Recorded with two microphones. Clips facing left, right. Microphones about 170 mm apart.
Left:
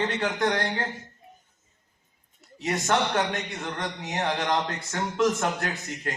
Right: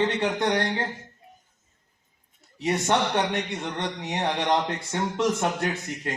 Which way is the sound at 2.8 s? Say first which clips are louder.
Even; 20° right (ahead or behind).